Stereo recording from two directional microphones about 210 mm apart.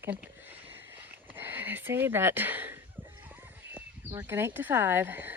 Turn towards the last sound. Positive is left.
turn(degrees=-10)  # may be behind; listen again after turning